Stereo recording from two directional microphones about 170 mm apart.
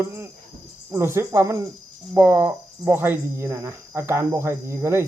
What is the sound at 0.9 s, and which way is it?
Speech, 15° right (ahead or behind).